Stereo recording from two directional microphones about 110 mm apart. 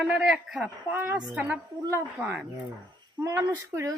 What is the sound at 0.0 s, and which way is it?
Speech, 5° right (ahead or behind).